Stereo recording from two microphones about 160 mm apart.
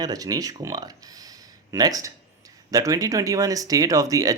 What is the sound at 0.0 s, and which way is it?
Speech, 25° right (ahead or behind).